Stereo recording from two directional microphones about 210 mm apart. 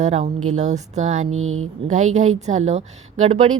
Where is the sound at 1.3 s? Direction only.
75° right (ahead or behind).